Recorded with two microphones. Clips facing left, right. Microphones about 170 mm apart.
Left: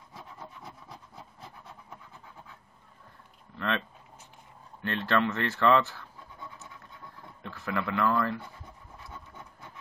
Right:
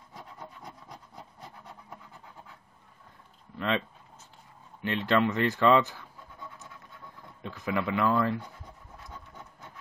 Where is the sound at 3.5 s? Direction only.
15° right (ahead or behind).